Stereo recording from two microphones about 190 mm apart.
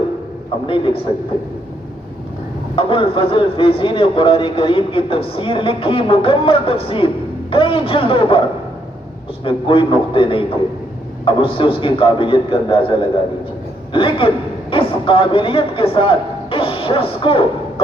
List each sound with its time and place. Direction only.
2.7 s a man's voice: 25° left (ahead or behind)